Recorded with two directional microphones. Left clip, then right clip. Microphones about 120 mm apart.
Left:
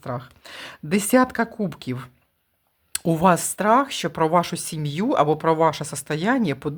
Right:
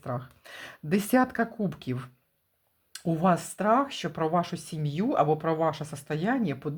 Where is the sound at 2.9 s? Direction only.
50° left (ahead or behind).